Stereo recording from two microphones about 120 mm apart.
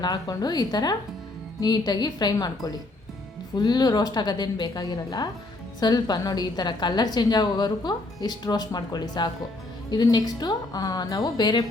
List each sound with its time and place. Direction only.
0.0 s a woman's voice: 35° left (ahead or behind)